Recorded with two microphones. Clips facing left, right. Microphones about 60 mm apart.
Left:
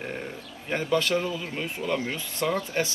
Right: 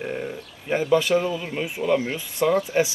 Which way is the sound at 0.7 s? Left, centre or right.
Centre.